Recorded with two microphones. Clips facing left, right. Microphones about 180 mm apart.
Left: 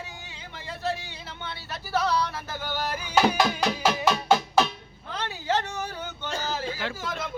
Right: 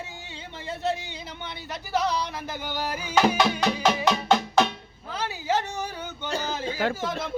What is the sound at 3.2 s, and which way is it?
Music, centre (ahead or behind).